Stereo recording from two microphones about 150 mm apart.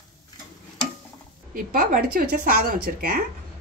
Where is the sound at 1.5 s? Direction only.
65° right (ahead or behind).